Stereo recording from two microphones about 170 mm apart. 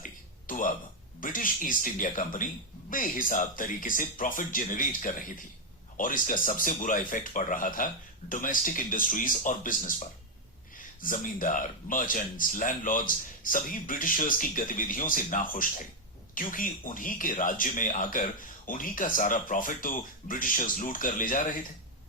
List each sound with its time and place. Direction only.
0.0 s music: 50° left (ahead or behind)
1.2 s speech: 55° left (ahead or behind)
11.0 s speech: 50° left (ahead or behind)